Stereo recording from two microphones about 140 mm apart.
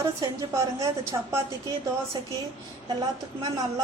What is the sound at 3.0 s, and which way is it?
Speech, 30° right (ahead or behind).